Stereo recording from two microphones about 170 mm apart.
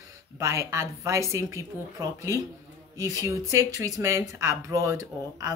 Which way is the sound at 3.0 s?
20° right (ahead or behind).